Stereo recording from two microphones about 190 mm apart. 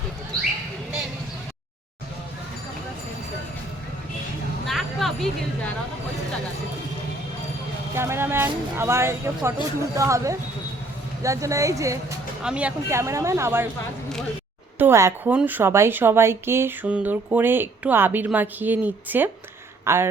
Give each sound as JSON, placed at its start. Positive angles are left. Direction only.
{"t": 4.6, "sound": "a sound", "side_deg": 0}
{"t": 7.9, "sound": "speech", "side_deg": -15}
{"t": 12.4, "sound": "speech", "side_deg": -5}
{"t": 14.8, "sound": "speech", "side_deg": -15}